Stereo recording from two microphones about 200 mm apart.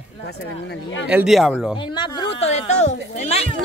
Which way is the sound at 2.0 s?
25° left (ahead or behind).